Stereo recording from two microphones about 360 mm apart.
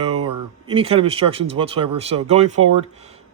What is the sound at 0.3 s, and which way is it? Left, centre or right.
Speech, centre.